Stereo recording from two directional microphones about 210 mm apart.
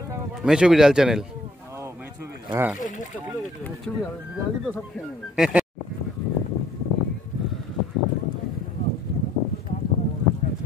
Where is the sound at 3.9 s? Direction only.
5° left (ahead or behind).